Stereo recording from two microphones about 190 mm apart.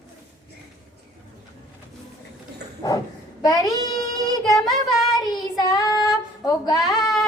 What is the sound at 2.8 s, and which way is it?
A child's voice, 20° left (ahead or behind).